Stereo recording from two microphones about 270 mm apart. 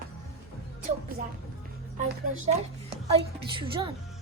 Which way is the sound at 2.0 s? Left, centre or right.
Right.